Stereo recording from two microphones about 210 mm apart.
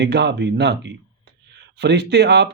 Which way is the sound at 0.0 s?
55° right (ahead or behind).